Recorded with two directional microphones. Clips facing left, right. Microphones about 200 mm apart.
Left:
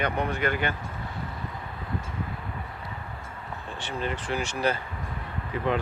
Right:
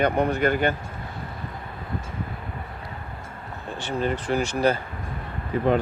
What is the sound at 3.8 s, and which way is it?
Speech, 40° right (ahead or behind).